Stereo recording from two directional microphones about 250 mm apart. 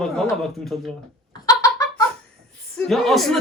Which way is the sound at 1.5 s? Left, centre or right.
Centre.